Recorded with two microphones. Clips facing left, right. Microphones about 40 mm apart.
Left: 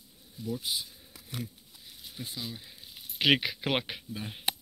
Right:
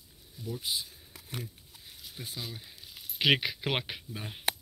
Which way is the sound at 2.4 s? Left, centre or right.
Centre.